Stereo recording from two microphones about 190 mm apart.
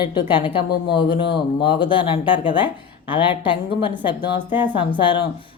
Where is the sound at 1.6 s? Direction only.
25° left (ahead or behind).